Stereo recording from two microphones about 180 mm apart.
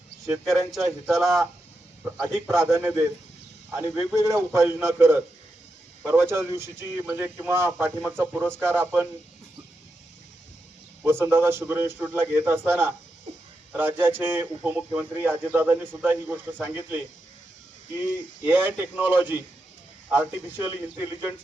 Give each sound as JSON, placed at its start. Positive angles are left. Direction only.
{"t": 1.0, "sound": "speech", "side_deg": 0}
{"t": 2.5, "sound": "speech", "side_deg": -15}
{"t": 11.0, "sound": "speech", "side_deg": -15}
{"t": 18.4, "sound": "speech", "side_deg": -10}